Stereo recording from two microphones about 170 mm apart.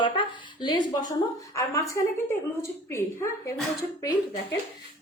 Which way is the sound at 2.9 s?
15° left (ahead or behind).